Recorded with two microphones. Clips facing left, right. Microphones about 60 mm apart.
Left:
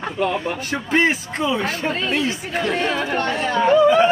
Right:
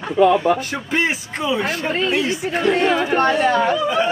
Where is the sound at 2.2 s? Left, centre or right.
Right.